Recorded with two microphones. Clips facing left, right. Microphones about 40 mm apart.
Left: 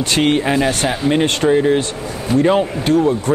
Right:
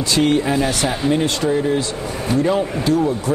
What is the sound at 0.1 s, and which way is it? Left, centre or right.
Speech, left.